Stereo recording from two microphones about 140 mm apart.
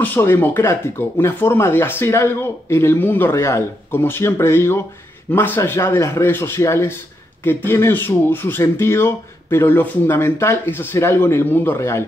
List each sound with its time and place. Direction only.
0.0 s speech: 15° left (ahead or behind)